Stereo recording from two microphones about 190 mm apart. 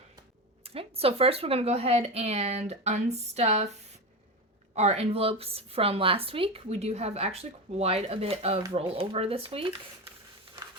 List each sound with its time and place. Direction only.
0.6 s a woman's voice: 30° right (ahead or behind)
4.7 s a woman's voice: 35° right (ahead or behind)